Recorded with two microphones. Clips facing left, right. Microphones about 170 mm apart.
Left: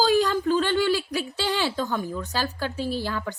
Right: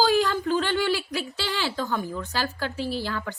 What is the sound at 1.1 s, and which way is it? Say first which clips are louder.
Speech: left 3 dB; 15° left (ahead or behind).